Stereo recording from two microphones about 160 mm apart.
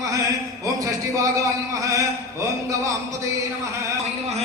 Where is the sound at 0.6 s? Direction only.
20° right (ahead or behind).